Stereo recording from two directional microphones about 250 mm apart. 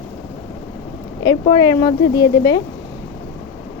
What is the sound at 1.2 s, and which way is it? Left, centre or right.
Speech, centre.